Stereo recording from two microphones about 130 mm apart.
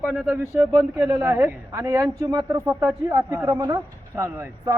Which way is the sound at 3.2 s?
25° right (ahead or behind).